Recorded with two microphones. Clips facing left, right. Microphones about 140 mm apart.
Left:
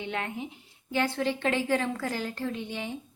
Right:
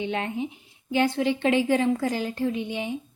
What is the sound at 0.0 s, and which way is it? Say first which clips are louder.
A woman's voice: right 6 dB; 20° right (ahead or behind).